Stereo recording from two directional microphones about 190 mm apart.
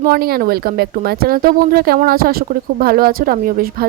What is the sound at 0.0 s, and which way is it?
Speech, 50° right (ahead or behind).